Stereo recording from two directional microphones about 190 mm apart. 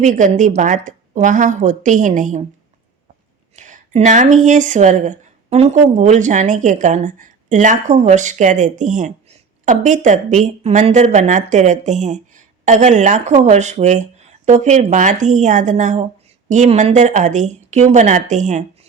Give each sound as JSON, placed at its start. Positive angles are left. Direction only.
{"t": 0.0, "sound": "speech", "side_deg": -40}
{"t": 3.5, "sound": "speech", "side_deg": -40}